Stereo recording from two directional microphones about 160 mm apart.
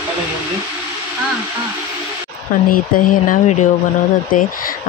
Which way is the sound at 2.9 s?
55° left (ahead or behind).